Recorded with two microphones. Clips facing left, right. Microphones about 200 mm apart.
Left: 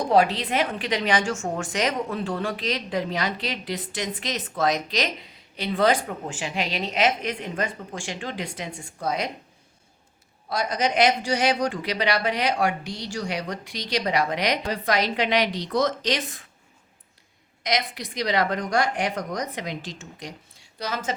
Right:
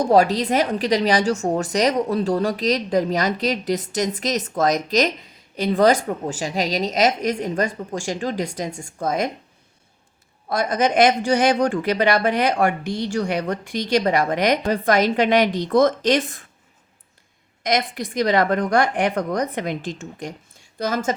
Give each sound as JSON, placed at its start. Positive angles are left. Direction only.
{"t": 0.1, "sound": "a woman's voice", "side_deg": -40}
{"t": 10.5, "sound": "speech", "side_deg": -50}
{"t": 17.6, "sound": "speech", "side_deg": -50}